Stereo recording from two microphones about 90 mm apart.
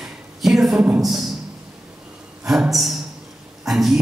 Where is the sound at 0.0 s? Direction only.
Centre (ahead or behind).